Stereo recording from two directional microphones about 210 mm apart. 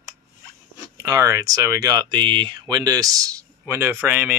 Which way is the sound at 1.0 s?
15° right (ahead or behind).